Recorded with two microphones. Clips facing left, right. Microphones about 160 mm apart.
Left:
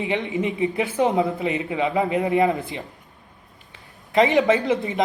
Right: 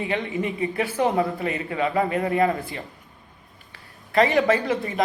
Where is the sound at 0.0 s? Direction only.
20° left (ahead or behind).